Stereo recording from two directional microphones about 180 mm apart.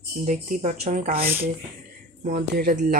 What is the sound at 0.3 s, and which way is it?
Speech, 45° right (ahead or behind).